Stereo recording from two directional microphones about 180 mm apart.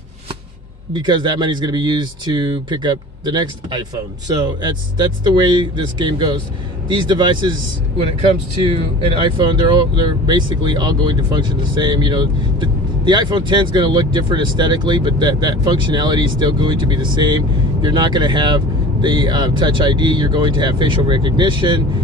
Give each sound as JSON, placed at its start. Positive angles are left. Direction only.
{"t": 0.9, "sound": "speech", "side_deg": -25}
{"t": 9.0, "sound": "speech", "side_deg": -25}